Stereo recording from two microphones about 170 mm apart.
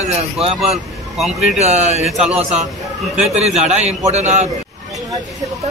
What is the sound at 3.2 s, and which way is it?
A man's voice, 40° right (ahead or behind).